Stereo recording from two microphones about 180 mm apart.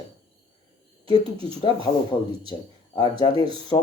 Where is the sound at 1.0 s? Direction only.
25° left (ahead or behind).